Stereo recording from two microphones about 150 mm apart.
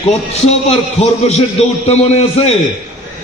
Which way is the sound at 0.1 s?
45° left (ahead or behind).